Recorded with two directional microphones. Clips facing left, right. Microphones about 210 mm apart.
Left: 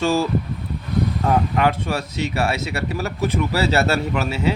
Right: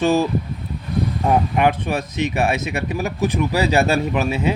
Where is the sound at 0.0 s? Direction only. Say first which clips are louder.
Right 2 dB; 20° right (ahead or behind).